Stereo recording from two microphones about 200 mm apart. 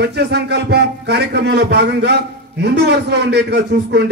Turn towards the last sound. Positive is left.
turn(degrees=-60)  # may be behind; listen again after turning